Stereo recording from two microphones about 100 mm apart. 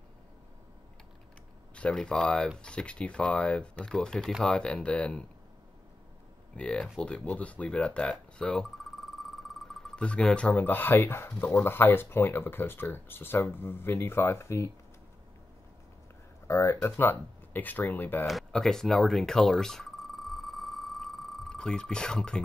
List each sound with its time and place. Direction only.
1.8 s speech: 10° left (ahead or behind)
6.5 s speech: 10° left (ahead or behind); by 14.7 s 25° left (ahead or behind)
16.4 s speech: 25° left (ahead or behind)
18.2 s telephone: centre (ahead or behind)